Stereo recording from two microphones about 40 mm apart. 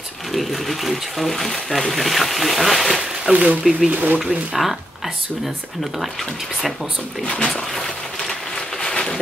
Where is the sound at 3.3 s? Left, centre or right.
Right.